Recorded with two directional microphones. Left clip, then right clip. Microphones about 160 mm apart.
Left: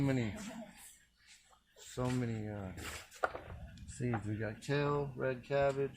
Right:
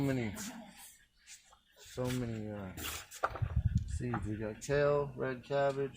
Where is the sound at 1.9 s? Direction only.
30° left (ahead or behind).